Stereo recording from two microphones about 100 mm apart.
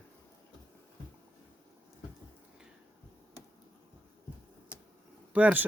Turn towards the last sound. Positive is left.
turn(degrees=-15)  # may be behind; listen again after turning